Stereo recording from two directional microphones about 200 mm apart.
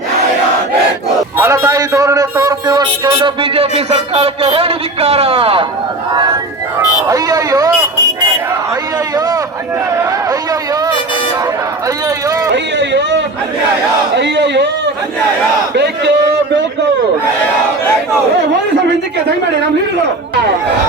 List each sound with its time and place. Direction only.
1.4 s a man's voice: 15° right (ahead or behind)
7.1 s a man's voice: 15° right (ahead or behind)
9.1 s a sound: 20° right (ahead or behind)
12.7 s a sound: 60° right (ahead or behind)
14.2 s a man's voice: 60° right (ahead or behind)
15.7 s a man's voice: 60° right (ahead or behind)